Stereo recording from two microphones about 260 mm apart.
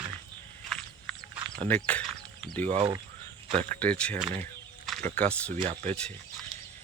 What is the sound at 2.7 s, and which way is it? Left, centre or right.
Speech, right.